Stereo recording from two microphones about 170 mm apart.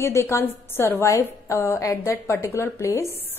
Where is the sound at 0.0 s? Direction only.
15° left (ahead or behind).